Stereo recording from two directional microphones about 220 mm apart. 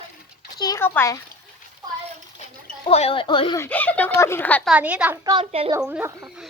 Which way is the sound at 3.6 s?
5° left (ahead or behind).